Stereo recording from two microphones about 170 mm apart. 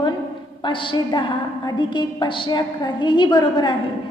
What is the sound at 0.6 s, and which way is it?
A woman's voice, 30° left (ahead or behind).